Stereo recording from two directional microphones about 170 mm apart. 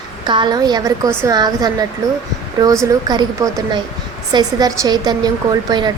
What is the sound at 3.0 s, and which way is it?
A woman's voice, 20° right (ahead or behind).